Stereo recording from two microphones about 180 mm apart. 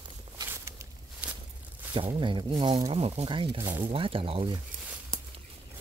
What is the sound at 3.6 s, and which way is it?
Speech, 15° right (ahead or behind).